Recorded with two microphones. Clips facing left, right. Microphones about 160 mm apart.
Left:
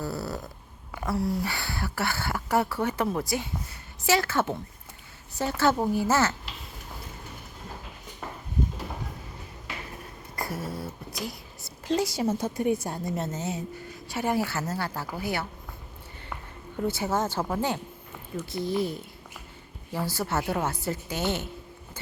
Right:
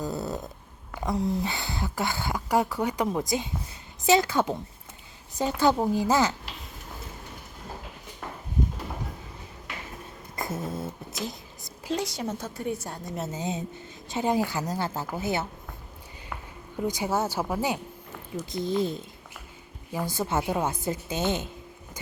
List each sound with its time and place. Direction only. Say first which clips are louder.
0.0 s snoring: right 1 dB; 20° right (ahead or behind)
1.0 s speech: right 1 dB; 20° right (ahead or behind)
10.3 s a sound: right 1 dB; 20° right (ahead or behind)
11.9 s a woman's voice: left 4 dB; 5° left (ahead or behind)
13.1 s a woman's voice: left 1 dB; 5° right (ahead or behind)
13.4 s a woman's voice: right 1 dB; 20° right (ahead or behind)
16.7 s a woman's voice: even; 15° right (ahead or behind)